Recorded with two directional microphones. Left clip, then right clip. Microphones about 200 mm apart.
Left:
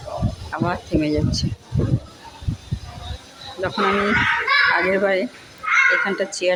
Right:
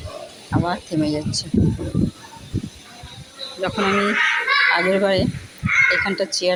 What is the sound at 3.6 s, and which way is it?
Speech, 5° left (ahead or behind).